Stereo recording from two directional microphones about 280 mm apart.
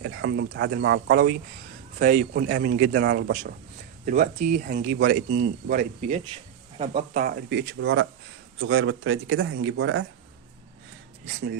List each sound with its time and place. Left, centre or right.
0.0 s a man's voice: right
4.0 s speech: right
7.7 s speech: right
11.3 s a man's voice: right